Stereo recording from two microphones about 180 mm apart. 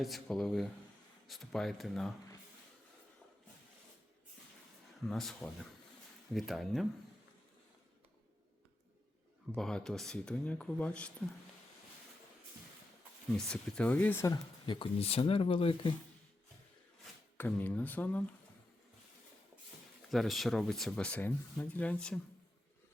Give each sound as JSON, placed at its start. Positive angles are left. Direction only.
{"t": 0.0, "sound": "speech", "side_deg": 0}
{"t": 5.0, "sound": "speech", "side_deg": 0}
{"t": 9.6, "sound": "speech", "side_deg": 5}
{"t": 13.3, "sound": "speech", "side_deg": 5}
{"t": 17.3, "sound": "speech", "side_deg": 10}
{"t": 20.1, "sound": "speech", "side_deg": 0}